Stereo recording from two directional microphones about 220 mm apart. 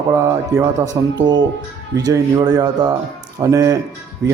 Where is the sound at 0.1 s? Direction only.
10° right (ahead or behind).